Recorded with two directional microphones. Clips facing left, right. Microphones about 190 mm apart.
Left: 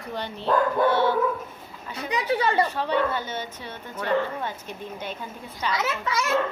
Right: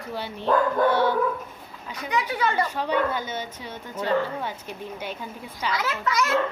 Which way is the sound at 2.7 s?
10° right (ahead or behind).